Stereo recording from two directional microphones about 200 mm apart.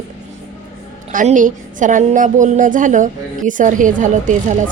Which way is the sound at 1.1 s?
40° right (ahead or behind).